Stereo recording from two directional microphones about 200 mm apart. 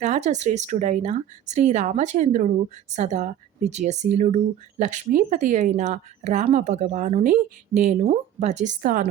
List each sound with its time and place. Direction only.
0.0 s speech: 35° right (ahead or behind)